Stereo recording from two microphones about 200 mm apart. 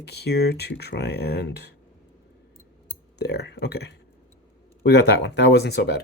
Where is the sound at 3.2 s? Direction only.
55° left (ahead or behind).